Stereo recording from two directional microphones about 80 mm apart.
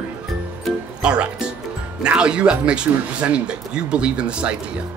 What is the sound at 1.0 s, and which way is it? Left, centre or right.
Speech, centre.